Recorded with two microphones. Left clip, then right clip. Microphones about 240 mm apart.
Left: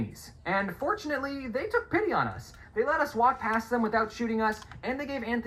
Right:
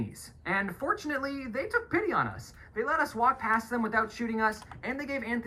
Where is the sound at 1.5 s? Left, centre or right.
Centre.